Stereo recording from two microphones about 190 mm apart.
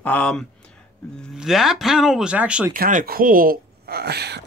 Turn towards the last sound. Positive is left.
turn(degrees=-60)  # may be behind; listen again after turning